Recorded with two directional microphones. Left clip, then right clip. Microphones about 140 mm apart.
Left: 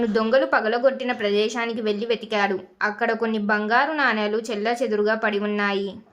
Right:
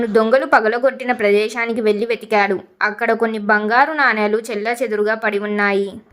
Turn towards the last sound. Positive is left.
turn(degrees=-35)  # may be behind; listen again after turning